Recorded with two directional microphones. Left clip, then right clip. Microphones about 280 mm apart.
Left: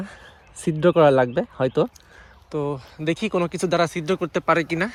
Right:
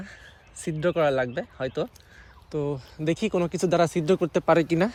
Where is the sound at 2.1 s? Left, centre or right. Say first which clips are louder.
Left 3 dB; centre.